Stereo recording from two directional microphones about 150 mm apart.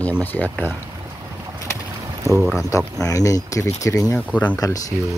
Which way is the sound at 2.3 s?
20° right (ahead or behind).